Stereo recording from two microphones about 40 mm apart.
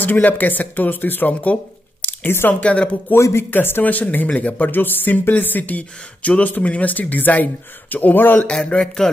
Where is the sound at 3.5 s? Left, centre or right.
Left.